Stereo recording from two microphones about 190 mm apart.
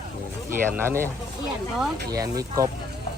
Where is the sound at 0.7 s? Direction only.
10° right (ahead or behind).